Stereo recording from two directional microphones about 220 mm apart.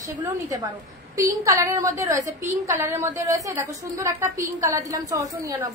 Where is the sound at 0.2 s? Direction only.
15° right (ahead or behind).